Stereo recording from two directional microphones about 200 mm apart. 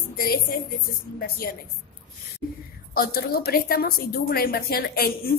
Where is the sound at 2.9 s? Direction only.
50° left (ahead or behind).